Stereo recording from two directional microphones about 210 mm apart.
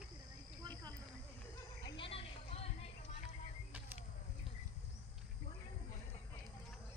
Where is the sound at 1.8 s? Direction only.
20° left (ahead or behind).